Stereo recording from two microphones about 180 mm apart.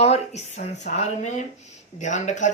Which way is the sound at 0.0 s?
35° left (ahead or behind).